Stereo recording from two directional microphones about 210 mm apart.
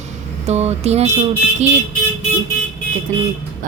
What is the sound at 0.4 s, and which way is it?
Vehicle, 30° right (ahead or behind).